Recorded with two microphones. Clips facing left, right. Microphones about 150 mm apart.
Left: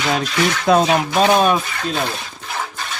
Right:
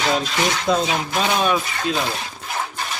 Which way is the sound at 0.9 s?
45° left (ahead or behind).